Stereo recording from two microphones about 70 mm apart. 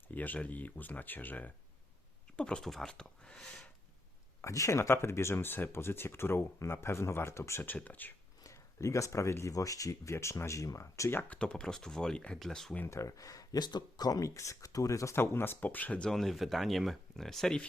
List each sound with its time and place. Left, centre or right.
0.1 s speech: left
2.3 s speech: centre
4.4 s speech: left
7.8 s speech: left
8.4 s speech: left
11.3 s speech: centre
12.9 s speech: left
15.1 s speech: left; by 16.0 s centre
16.0 s speech: centre